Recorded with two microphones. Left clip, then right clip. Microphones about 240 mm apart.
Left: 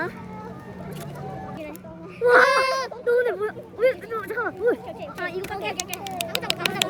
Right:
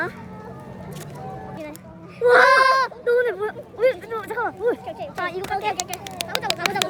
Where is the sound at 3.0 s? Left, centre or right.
Centre.